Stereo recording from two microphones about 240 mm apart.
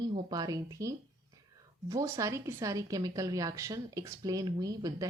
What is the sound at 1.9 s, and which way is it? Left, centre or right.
A woman's voice, centre.